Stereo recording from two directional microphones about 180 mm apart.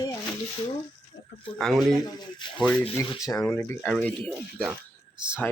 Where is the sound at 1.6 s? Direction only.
Centre (ahead or behind).